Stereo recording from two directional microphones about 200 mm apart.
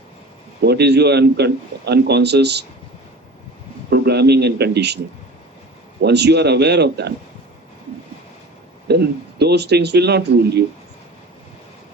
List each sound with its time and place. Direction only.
0.6 s a man's voice: 55° right (ahead or behind)
3.8 s a man's voice: 55° right (ahead or behind)
6.0 s a man's voice: 55° right (ahead or behind)
8.9 s a man's voice: 55° right (ahead or behind)